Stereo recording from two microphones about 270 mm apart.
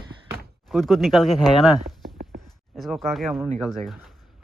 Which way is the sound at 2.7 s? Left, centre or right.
Centre.